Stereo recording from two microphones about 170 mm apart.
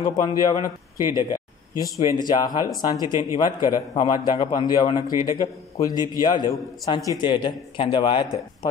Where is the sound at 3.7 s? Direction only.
30° left (ahead or behind).